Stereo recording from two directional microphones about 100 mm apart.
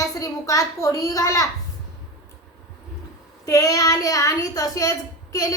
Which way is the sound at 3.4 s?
35° left (ahead or behind).